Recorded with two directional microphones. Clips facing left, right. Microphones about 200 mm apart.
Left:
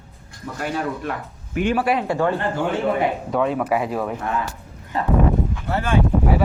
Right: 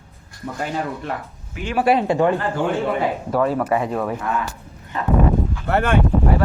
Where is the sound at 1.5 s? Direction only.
55° left (ahead or behind).